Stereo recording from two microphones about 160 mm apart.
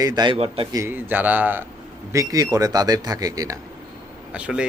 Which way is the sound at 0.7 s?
15° right (ahead or behind).